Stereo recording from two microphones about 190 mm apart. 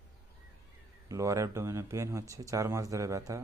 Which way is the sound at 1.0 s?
15° right (ahead or behind).